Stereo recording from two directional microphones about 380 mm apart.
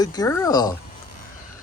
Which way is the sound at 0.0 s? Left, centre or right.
Centre.